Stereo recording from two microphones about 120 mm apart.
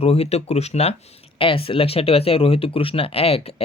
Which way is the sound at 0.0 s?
60° left (ahead or behind).